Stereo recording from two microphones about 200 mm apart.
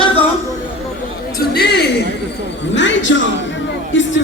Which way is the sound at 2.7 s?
65° left (ahead or behind).